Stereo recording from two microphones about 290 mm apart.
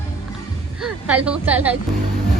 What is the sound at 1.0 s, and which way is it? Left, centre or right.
Speech, centre.